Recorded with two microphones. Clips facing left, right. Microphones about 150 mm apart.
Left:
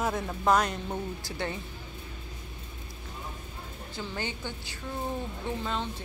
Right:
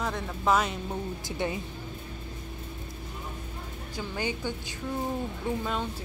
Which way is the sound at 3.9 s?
10° right (ahead or behind).